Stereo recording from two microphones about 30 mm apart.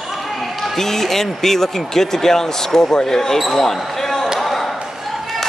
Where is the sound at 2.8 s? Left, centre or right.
Left.